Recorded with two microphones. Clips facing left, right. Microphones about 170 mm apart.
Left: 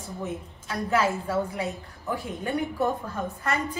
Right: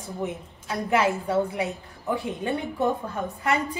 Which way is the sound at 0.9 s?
20° right (ahead or behind).